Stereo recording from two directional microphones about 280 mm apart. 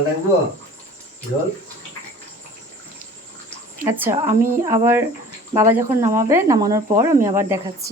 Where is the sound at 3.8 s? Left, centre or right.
Centre.